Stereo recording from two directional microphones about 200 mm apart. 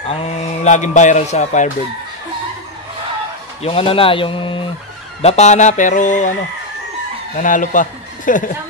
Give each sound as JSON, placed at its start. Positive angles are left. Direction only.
{"t": 0.1, "sound": "speech", "side_deg": 35}
{"t": 3.6, "sound": "speech", "side_deg": 30}
{"t": 7.3, "sound": "speech", "side_deg": 40}